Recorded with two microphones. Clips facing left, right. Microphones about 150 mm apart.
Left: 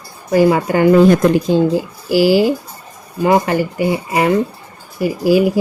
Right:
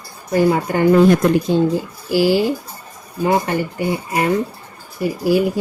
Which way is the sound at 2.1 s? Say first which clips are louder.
Left 3 dB; 90° left.